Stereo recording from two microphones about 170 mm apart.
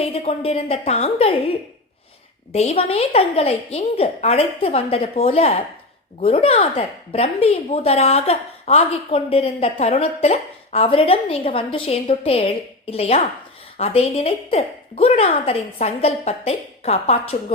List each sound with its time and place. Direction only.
0.0 s speech: 35° left (ahead or behind)
2.5 s speech: 40° left (ahead or behind)